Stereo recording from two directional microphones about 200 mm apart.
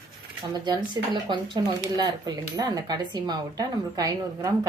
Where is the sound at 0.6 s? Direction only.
20° right (ahead or behind).